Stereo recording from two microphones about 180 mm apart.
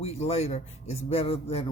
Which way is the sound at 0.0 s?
35° left (ahead or behind).